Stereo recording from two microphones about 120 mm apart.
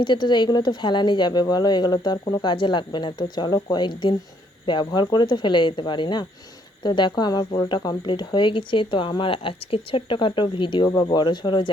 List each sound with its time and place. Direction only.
0.0 s speech: 40° left (ahead or behind)